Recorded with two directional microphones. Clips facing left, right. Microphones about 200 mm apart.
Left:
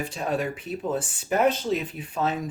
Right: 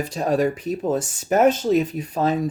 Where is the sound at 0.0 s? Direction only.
40° right (ahead or behind).